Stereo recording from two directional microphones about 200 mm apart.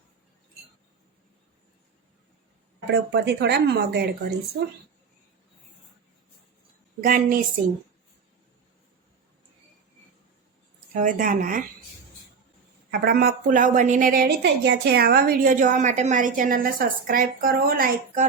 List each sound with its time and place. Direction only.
2.9 s speech: 60° right (ahead or behind)
7.0 s a woman's voice: 45° right (ahead or behind)
10.9 s a woman's voice: 40° right (ahead or behind)
12.9 s a woman's voice: 50° right (ahead or behind)